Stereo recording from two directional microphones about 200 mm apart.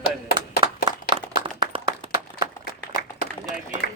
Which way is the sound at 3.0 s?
50° left (ahead or behind).